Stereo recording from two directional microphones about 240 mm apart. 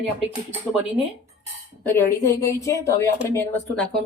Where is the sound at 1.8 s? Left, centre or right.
Centre.